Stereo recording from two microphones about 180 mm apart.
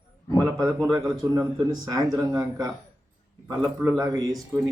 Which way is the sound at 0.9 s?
20° right (ahead or behind).